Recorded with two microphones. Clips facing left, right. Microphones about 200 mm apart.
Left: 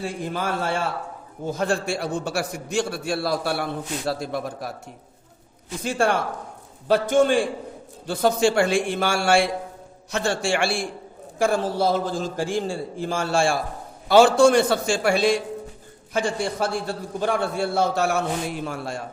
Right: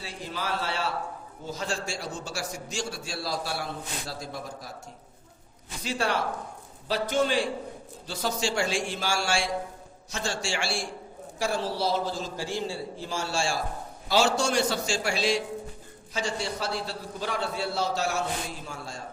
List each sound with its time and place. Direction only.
0.0 s a man's voice: 50° left (ahead or behind)
5.8 s a man's voice: 50° left (ahead or behind)